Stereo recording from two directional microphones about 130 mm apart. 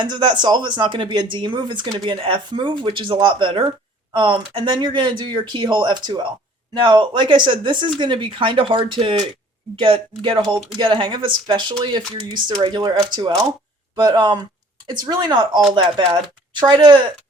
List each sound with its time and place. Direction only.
0.0 s speech: 35° right (ahead or behind)